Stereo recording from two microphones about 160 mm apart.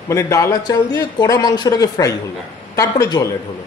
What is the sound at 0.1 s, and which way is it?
A man's voice, 20° left (ahead or behind).